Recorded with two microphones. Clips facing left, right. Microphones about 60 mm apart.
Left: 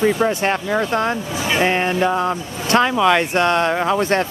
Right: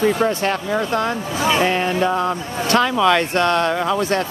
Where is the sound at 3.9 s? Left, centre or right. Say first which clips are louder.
Left 2 dB; left.